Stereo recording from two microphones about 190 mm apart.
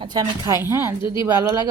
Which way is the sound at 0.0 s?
20° right (ahead or behind).